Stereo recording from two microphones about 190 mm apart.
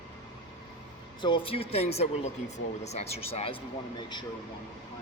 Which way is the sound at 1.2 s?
25° left (ahead or behind).